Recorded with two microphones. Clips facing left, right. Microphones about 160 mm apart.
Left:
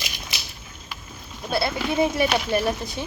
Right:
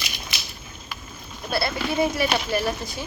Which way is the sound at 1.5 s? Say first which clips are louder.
Left 1 dB; 20° left (ahead or behind).